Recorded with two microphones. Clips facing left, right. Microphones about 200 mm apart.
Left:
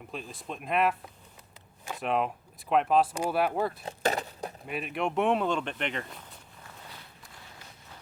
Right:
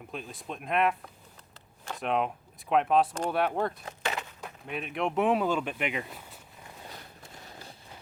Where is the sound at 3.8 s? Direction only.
35° left (ahead or behind).